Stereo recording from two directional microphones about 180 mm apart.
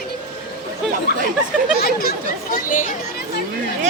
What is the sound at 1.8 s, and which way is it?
Speech, 55° left (ahead or behind).